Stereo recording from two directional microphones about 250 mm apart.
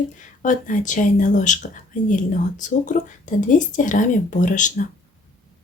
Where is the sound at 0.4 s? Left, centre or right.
Left.